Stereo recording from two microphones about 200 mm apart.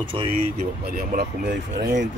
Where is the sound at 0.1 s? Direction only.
25° right (ahead or behind).